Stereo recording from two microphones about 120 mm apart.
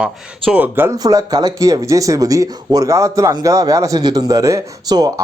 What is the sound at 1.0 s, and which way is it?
Speech, 30° right (ahead or behind).